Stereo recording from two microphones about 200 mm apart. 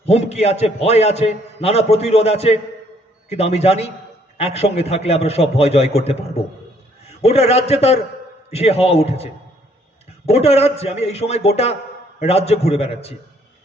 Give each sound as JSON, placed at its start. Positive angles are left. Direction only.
{"t": 0.0, "sound": "a man's voice", "side_deg": 35}
{"t": 7.2, "sound": "a man's voice", "side_deg": 30}